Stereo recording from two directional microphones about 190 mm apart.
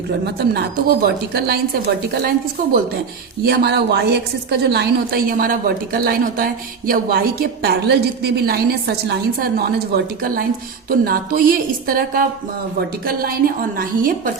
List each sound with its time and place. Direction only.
0.3 s a woman's voice: 60° right (ahead or behind)
3.4 s a woman's voice: 60° right (ahead or behind)